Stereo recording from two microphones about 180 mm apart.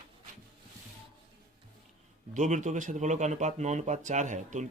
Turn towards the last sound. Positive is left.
turn(degrees=-45)  # may be behind; listen again after turning